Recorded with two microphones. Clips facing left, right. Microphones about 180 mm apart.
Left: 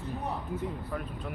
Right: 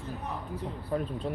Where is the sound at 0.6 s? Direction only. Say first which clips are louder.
Right 3 dB; 30° right (ahead or behind).